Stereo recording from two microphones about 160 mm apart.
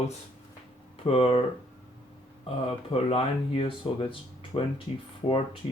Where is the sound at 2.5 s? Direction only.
35° left (ahead or behind).